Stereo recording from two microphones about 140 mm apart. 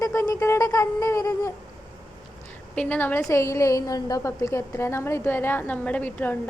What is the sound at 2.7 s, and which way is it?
A woman's voice, 10° left (ahead or behind).